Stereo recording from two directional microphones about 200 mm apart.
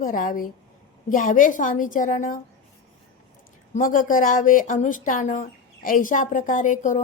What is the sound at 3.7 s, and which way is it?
Speech, 40° left (ahead or behind).